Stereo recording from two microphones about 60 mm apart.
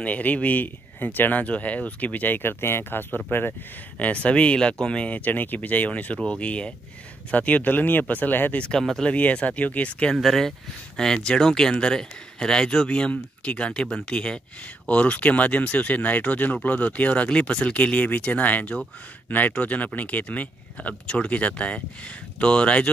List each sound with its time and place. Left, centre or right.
0.0 s speech: left
4.0 s speech: left
8.5 s speech: centre
9.0 s speech: left
10.1 s speech: centre